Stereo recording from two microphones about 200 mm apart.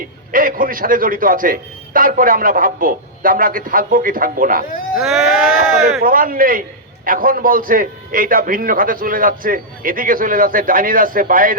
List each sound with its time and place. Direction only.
0.3 s a man's voice: 45° right (ahead or behind)
4.9 s speech: centre (ahead or behind)
6.0 s a man's voice: 45° right (ahead or behind)